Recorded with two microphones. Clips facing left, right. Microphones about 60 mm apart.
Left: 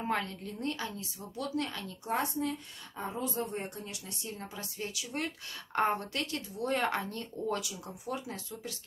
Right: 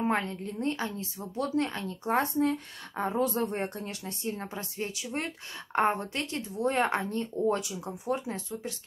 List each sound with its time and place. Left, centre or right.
0.0 s speech: right
3.0 s speech: right
3.5 s speech: right